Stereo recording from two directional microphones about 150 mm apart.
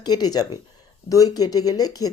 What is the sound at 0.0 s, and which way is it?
A woman's voice, 25° left (ahead or behind).